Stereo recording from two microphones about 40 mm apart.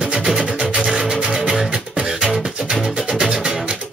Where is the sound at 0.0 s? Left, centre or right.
Centre.